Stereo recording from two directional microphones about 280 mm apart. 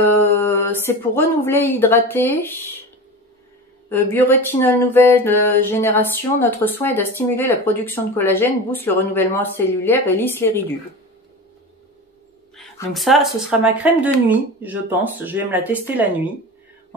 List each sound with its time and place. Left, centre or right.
0.1 s speech: centre
3.9 s speech: centre
12.5 s a sound: centre
13.0 s speech: centre